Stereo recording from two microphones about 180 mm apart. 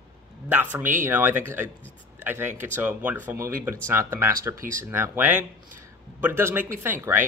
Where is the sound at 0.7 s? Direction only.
15° right (ahead or behind).